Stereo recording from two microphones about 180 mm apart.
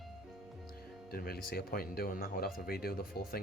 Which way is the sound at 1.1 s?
55° left (ahead or behind).